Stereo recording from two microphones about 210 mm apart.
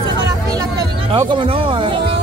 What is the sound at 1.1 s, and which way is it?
Music, 25° right (ahead or behind).